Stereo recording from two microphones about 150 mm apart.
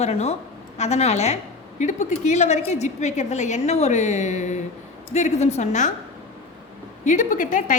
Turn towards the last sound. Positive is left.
turn(degrees=60)  # may be behind; listen again after turning